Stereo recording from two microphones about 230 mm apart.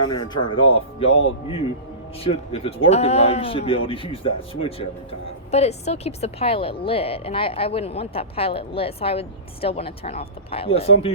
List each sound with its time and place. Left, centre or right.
0.0 s a woman's voice: centre
2.2 s a woman's voice: left